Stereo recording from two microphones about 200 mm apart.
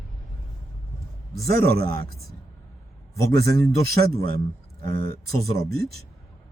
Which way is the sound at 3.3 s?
55° right (ahead or behind).